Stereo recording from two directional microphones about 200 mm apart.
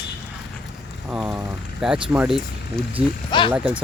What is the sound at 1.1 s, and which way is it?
Speech, 5° right (ahead or behind).